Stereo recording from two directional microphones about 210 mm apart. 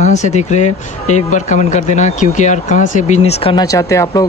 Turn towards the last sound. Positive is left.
turn(degrees=15)  # may be behind; listen again after turning